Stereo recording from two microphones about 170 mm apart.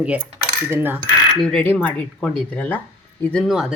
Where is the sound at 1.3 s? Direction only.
5° left (ahead or behind).